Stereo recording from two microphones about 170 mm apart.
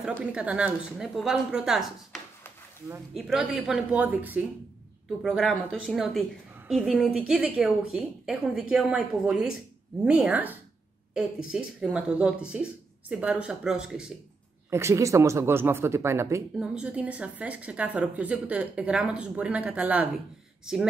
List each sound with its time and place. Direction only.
0.0 s a woman's voice: 10° right (ahead or behind)
3.2 s a woman's voice: 5° right (ahead or behind)
5.4 s a woman's voice: 5° left (ahead or behind)
14.7 s a woman's voice: 15° right (ahead or behind)